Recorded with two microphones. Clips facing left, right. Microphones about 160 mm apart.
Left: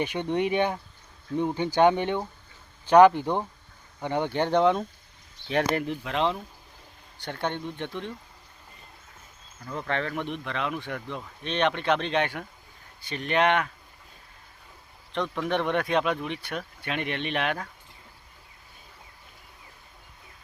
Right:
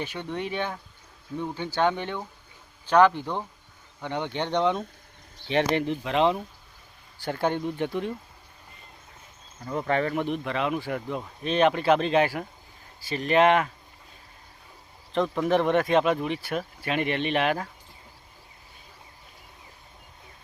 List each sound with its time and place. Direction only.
0.0 s speech: 15° left (ahead or behind); by 8.1 s 5° right (ahead or behind)
9.7 s speech: 10° right (ahead or behind)
15.1 s speech: centre (ahead or behind)